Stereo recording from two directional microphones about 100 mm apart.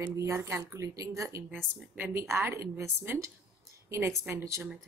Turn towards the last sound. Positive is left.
turn(degrees=-30)  # may be behind; listen again after turning